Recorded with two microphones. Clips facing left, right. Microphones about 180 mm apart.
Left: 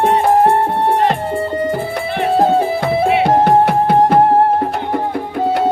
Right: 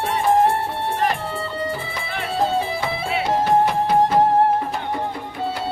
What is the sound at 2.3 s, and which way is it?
Music, 55° left (ahead or behind).